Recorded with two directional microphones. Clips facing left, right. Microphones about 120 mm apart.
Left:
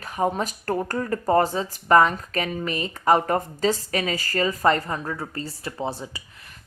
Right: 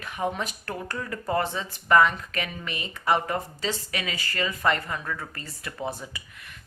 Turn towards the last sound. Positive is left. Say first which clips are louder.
# left 3 dB
turn(degrees=30)  # may be behind; listen again after turning